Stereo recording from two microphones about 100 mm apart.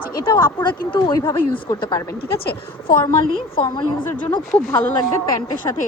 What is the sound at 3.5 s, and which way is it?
Speech, 50° left (ahead or behind).